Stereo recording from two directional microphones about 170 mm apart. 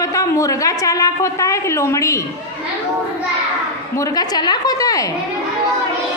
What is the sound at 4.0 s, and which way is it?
A woman's voice, 20° left (ahead or behind).